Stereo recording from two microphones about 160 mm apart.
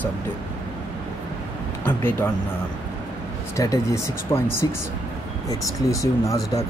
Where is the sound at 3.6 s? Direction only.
20° left (ahead or behind).